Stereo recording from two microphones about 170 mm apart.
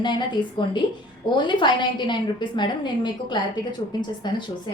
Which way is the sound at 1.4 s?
25° left (ahead or behind).